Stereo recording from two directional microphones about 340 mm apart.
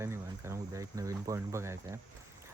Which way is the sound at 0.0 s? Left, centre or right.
Centre.